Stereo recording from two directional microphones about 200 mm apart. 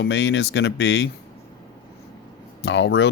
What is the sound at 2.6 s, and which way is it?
Speech, 65° left (ahead or behind).